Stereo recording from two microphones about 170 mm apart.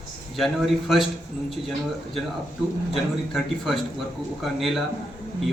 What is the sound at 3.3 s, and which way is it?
A man's voice, centre (ahead or behind).